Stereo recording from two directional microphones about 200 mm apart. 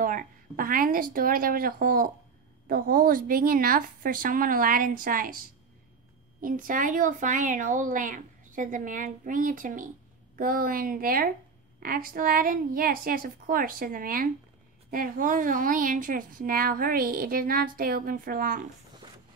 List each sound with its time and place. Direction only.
0.0 s a woman's voice: 45° right (ahead or behind)
6.4 s a woman's voice: 45° right (ahead or behind)